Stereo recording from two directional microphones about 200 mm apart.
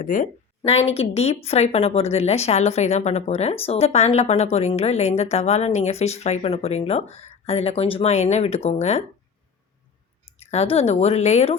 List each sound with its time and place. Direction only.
0.0 s a woman's voice: 40° left (ahead or behind)
10.2 s speech: 30° left (ahead or behind)